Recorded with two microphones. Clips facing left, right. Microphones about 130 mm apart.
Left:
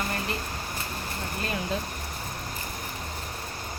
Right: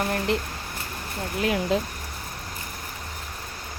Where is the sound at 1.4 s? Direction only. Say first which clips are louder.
Right 8 dB; 75° right (ahead or behind).